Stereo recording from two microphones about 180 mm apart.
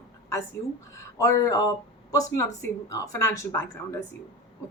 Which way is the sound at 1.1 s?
20° left (ahead or behind).